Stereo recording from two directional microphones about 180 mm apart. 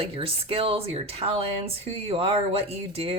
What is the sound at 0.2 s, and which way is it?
Speech, 30° right (ahead or behind).